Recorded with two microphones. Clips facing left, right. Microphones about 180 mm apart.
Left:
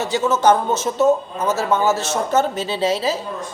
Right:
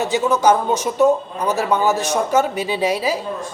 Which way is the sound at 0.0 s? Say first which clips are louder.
Right 1 dB; 15° right (ahead or behind).